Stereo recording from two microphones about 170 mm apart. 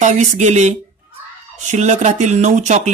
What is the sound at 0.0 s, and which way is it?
Speech, 45° right (ahead or behind).